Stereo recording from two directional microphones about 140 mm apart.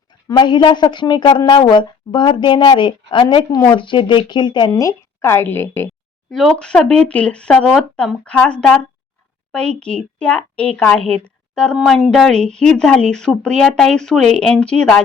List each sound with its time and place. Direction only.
0.3 s a woman's voice: 30° left (ahead or behind); by 5.9 s 15° left (ahead or behind)
6.3 s speech: centre (ahead or behind)